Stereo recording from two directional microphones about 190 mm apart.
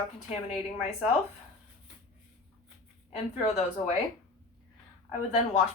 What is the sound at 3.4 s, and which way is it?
Speech, 35° left (ahead or behind).